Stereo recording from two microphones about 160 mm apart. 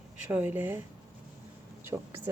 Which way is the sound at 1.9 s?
20° right (ahead or behind).